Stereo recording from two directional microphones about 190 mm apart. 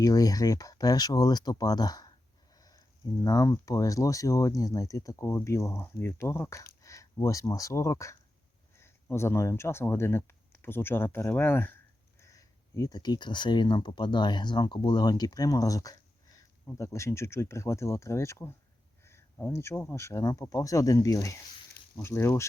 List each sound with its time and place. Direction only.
0.0 s speech: 20° left (ahead or behind)
2.6 s a sound: 20° left (ahead or behind)
3.2 s speech: 20° left (ahead or behind)